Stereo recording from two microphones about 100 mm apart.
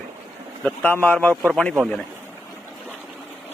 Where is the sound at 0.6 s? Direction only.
15° left (ahead or behind).